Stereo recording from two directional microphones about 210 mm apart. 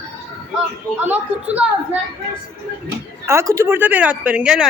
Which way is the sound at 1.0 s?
5° right (ahead or behind).